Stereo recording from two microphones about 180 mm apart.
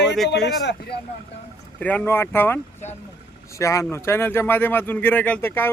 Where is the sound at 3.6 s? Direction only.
15° left (ahead or behind).